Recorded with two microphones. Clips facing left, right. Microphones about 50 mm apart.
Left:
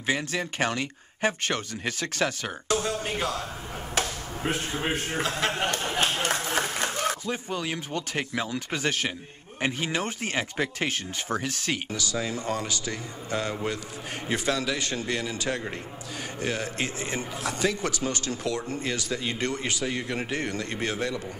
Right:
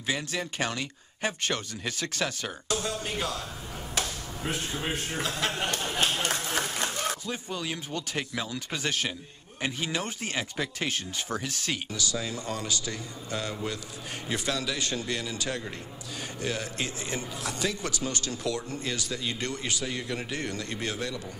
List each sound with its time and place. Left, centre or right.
0.0 s a man's voice: left